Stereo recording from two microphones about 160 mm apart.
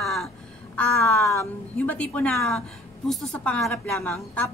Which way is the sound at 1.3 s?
15° left (ahead or behind).